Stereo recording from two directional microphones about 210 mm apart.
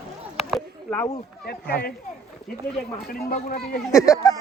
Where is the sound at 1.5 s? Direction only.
50° left (ahead or behind).